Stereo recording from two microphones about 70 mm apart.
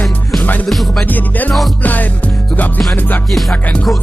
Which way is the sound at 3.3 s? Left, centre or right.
Centre.